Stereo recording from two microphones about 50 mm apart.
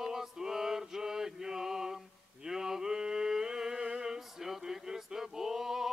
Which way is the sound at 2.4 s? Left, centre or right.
Centre.